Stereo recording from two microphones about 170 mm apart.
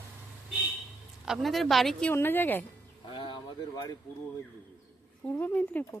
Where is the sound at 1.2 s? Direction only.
Centre (ahead or behind).